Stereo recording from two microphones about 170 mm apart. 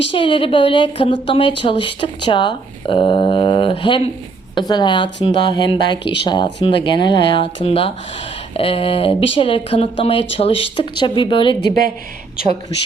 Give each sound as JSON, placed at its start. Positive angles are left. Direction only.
{"t": 0.1, "sound": "a woman's voice", "side_deg": 30}